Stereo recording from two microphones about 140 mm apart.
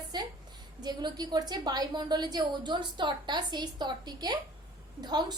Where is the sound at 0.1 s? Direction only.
30° right (ahead or behind).